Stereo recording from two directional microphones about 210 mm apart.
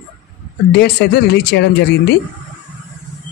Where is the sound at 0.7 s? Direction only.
50° left (ahead or behind).